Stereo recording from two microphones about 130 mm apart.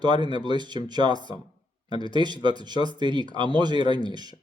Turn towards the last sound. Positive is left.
turn(degrees=-35)  # may be behind; listen again after turning